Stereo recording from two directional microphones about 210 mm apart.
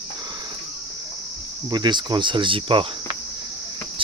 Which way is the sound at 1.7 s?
20° right (ahead or behind).